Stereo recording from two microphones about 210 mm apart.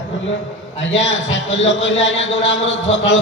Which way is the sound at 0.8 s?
65° left (ahead or behind).